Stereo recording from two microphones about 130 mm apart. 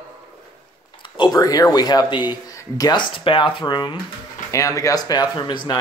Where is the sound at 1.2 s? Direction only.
30° left (ahead or behind).